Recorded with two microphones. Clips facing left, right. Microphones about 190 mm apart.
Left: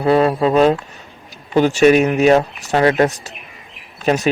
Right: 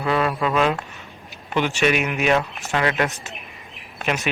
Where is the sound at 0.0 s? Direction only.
35° left (ahead or behind).